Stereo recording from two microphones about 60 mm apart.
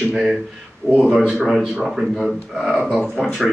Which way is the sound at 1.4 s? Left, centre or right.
Centre.